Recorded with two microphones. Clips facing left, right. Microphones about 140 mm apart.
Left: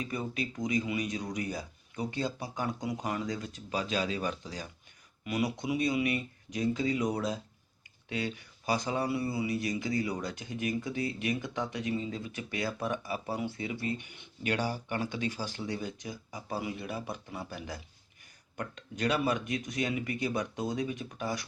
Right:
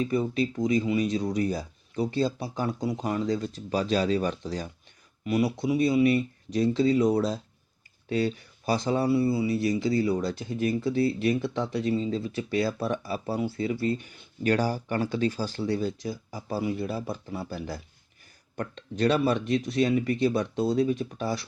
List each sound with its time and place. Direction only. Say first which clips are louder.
0.0 s speech: right 9 dB; 30° right (ahead or behind)
13.9 s speech: right 6 dB; 15° left (ahead or behind)
14.4 s speech: right 7 dB; 40° right (ahead or behind)